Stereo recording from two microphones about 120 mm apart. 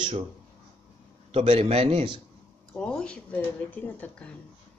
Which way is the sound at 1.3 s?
50° right (ahead or behind).